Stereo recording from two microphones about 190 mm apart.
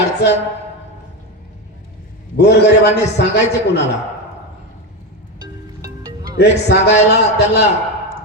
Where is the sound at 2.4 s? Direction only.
60° left (ahead or behind).